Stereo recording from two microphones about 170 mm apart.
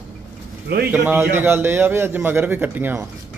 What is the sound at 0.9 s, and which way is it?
A man's voice, 10° right (ahead or behind).